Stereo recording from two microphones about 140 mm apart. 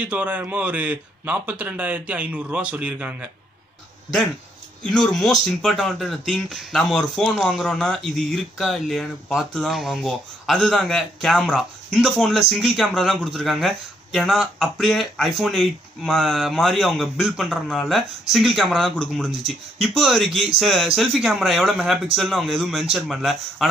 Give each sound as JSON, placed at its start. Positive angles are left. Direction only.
{"t": 0.0, "sound": "a man's voice", "side_deg": -10}
{"t": 4.8, "sound": "speech", "side_deg": 5}